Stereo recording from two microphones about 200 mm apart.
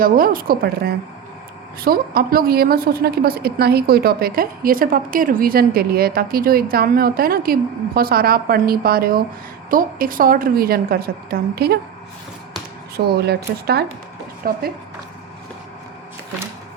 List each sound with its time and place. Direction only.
0.0 s a woman's voice: 45° right (ahead or behind)
13.0 s a woman's voice: 55° right (ahead or behind)